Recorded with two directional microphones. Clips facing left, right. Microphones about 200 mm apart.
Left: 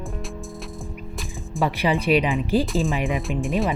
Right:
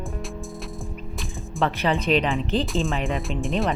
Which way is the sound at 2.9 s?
15° left (ahead or behind).